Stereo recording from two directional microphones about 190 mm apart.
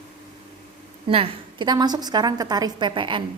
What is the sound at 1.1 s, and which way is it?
Speech, 25° right (ahead or behind).